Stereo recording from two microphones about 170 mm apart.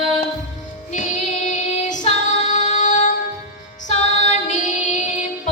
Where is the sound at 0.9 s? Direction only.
45° left (ahead or behind).